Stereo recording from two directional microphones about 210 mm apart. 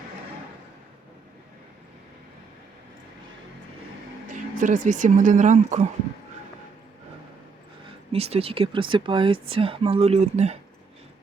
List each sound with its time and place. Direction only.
4.5 s speech: 40° right (ahead or behind)
8.1 s speech: 30° right (ahead or behind)